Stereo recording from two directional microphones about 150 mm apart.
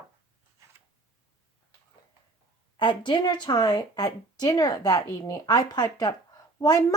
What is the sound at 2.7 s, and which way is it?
Speech, 35° left (ahead or behind).